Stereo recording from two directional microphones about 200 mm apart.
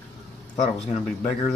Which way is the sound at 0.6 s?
35° left (ahead or behind).